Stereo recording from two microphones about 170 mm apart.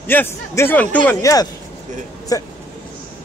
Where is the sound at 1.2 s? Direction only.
20° left (ahead or behind).